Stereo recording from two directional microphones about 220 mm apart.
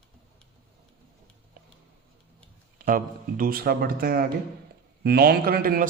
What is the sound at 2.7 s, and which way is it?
A man's voice, 40° right (ahead or behind).